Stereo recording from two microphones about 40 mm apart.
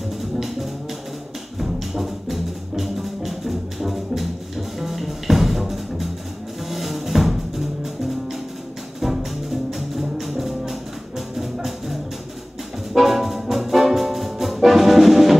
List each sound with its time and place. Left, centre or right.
0.2 s music: centre
12.9 s brass instrument: centre